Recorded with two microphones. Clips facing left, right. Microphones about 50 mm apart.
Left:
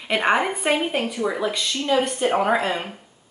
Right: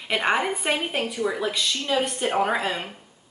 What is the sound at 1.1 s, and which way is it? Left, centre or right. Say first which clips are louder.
Speech: left 2 dB; centre.